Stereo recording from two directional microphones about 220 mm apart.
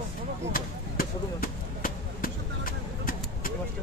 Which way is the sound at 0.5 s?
40° left (ahead or behind).